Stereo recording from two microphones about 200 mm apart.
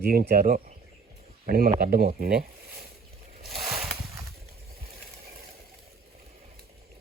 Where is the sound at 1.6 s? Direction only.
40° right (ahead or behind).